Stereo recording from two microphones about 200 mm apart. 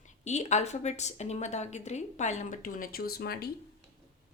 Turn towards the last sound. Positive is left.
turn(degrees=50)  # may be behind; listen again after turning